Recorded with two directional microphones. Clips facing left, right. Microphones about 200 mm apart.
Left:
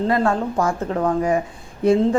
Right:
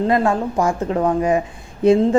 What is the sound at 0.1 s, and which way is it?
Speech, 15° right (ahead or behind).